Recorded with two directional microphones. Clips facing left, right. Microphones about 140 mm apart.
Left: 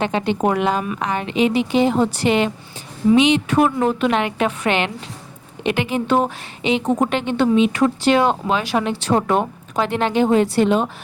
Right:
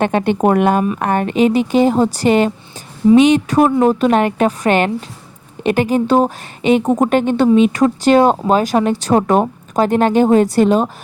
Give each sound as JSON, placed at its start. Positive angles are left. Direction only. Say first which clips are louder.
{"t": 0.0, "sound": "speech", "louder": "right 5 dB", "side_deg": -55}